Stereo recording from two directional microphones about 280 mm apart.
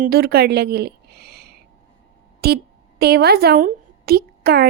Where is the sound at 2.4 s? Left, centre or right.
Right.